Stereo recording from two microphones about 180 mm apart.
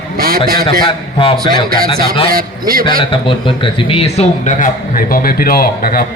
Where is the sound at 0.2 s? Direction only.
55° right (ahead or behind).